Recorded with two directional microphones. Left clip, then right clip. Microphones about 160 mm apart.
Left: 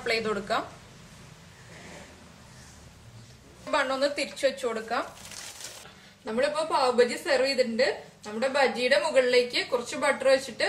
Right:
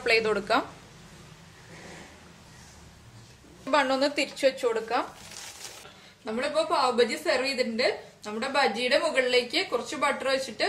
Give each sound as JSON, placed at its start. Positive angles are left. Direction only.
{"t": 0.0, "sound": "a woman's voice", "side_deg": -50}
{"t": 3.7, "sound": "a woman's voice", "side_deg": -45}
{"t": 6.2, "sound": "a woman's voice", "side_deg": -30}